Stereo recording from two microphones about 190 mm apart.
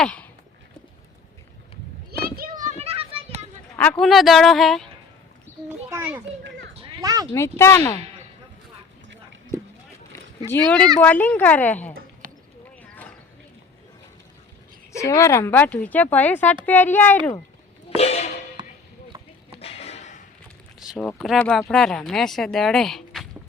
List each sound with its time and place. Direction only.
0.0 s a sound: 5° left (ahead or behind)
2.4 s a sound: 45° right (ahead or behind)
4.0 s speech: centre (ahead or behind)
5.9 s children playing: 10° right (ahead or behind)
6.8 s cat: 25° right (ahead or behind)
7.3 s a woman's voice: 15° left (ahead or behind)
10.5 s a woman's voice: 5° left (ahead or behind)
12.2 s clip-clop: 45° right (ahead or behind)
14.9 s a woman's voice: 15° left (ahead or behind)
17.8 s music: 35° left (ahead or behind)
18.6 s chop: 25° right (ahead or behind)
19.5 s a sound: 30° left (ahead or behind)
20.7 s a sound: centre (ahead or behind)
21.1 s speech: 5° left (ahead or behind)